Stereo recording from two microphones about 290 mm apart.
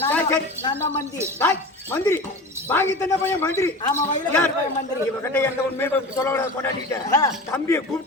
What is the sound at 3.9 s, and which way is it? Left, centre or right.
Speech, left.